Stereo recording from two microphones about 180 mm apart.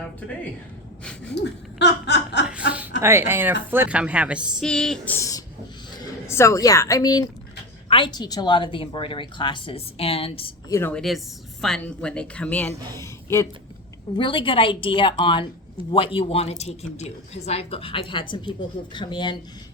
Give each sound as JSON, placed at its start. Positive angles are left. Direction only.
{"t": 1.0, "sound": "speech", "side_deg": 5}
{"t": 1.4, "sound": "speech", "side_deg": 70}
{"t": 3.0, "sound": "a woman's voice", "side_deg": -15}
{"t": 10.7, "sound": "speech", "side_deg": 10}
{"t": 14.2, "sound": "a woman's voice", "side_deg": 30}